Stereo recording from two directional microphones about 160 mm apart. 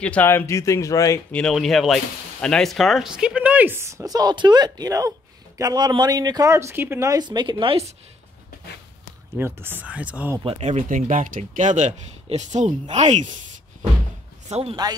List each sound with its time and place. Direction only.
0.0 s speech: 10° left (ahead or behind)
1.3 s speech: 5° left (ahead or behind); by 7.8 s 30° right (ahead or behind)
9.4 s speech: 15° right (ahead or behind)
10.4 s speech: 40° right (ahead or behind)
14.5 s a man's voice: 35° right (ahead or behind)